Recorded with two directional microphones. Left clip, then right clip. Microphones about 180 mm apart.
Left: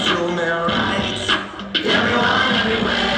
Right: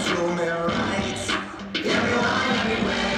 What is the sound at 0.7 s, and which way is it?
Music, 40° right (ahead or behind).